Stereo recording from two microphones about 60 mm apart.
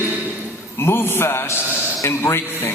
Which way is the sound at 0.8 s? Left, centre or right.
Left.